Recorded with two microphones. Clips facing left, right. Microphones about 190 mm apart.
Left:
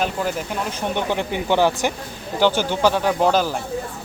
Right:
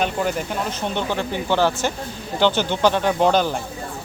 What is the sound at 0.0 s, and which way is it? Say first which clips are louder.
Speech: right 1 dB; centre (ahead or behind).